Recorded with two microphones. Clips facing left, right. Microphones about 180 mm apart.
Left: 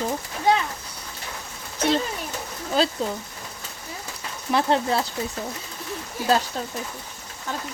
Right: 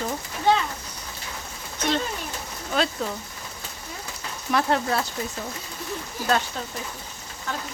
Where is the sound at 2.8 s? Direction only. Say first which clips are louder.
Left 3 dB; 30° left (ahead or behind).